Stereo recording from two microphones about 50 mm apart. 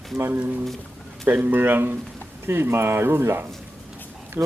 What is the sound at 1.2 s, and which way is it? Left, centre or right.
Speech, right.